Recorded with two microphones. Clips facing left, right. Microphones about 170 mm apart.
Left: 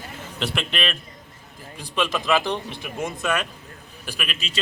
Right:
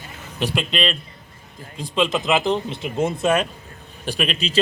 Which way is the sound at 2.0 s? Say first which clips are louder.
Right 2 dB; 20° right (ahead or behind).